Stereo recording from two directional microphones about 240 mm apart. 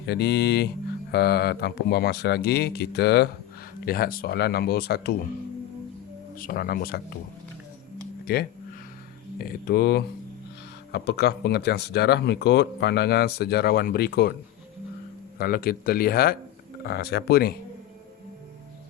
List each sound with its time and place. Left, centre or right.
0.0 s speech: left
6.3 s speech: left
8.2 s speech: left
15.4 s speech: left